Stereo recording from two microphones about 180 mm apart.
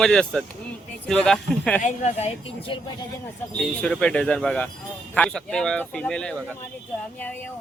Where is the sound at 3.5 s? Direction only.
5° left (ahead or behind).